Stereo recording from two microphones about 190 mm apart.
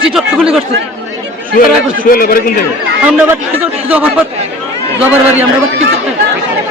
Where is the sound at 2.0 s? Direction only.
50° left (ahead or behind).